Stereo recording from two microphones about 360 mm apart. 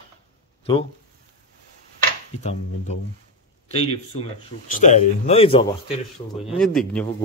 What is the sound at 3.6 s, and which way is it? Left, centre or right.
A man's voice, centre.